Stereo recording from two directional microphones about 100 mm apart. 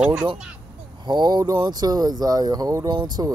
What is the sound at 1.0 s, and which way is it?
Speech, 45° right (ahead or behind).